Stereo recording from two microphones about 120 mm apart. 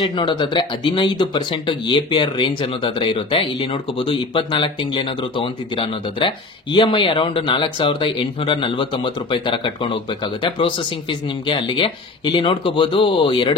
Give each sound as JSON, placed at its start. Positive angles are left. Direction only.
{"t": 0.1, "sound": "speech", "side_deg": 40}